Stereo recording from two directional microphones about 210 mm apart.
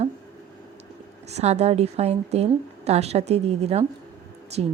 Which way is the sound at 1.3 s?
30° right (ahead or behind).